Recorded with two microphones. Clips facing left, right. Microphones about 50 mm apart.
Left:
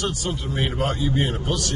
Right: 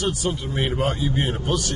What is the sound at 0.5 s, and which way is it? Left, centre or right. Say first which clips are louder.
A man's voice: left 1 dB; centre.